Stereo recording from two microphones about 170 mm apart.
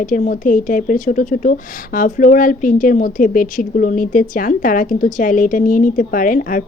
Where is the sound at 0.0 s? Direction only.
50° left (ahead or behind).